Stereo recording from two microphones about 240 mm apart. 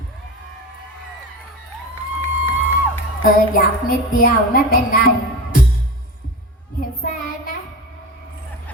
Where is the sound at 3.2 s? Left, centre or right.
Left.